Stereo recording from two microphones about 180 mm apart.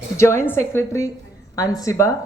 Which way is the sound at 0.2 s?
15° left (ahead or behind).